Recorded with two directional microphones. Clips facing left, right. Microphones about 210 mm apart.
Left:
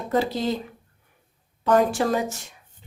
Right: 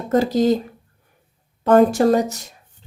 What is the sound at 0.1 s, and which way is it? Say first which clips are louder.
A woman's voice: right 7 dB; 45° right (ahead or behind).